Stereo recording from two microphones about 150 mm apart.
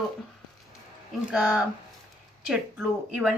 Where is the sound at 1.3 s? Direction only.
5° right (ahead or behind).